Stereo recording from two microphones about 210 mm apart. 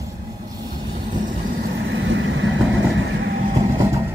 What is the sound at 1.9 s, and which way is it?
Vehicle, 60° right (ahead or behind).